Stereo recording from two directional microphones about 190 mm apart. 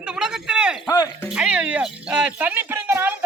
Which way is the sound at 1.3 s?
5° right (ahead or behind).